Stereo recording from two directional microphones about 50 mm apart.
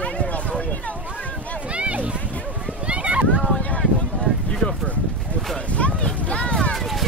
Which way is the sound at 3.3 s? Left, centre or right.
Centre.